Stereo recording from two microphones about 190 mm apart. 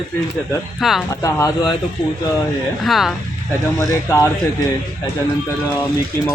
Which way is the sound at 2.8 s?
Centre (ahead or behind).